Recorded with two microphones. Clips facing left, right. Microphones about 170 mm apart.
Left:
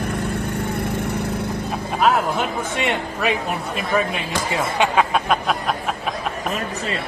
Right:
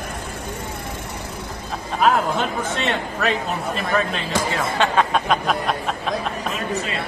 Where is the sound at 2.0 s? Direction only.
5° left (ahead or behind).